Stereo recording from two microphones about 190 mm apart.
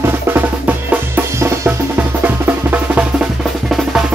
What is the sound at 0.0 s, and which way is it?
Music, 10° right (ahead or behind).